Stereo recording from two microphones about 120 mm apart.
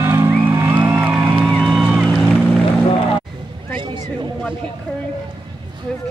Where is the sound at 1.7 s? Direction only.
5° right (ahead or behind).